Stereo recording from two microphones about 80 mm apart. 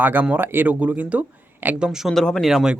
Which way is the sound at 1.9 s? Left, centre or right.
Centre.